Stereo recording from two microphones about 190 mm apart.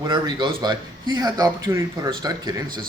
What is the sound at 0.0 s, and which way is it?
Speech, 25° right (ahead or behind).